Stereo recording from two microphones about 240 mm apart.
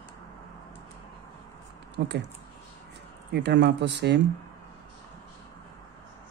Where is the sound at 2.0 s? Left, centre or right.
Right.